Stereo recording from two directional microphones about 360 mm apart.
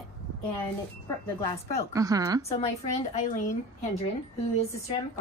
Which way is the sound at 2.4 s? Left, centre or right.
Centre.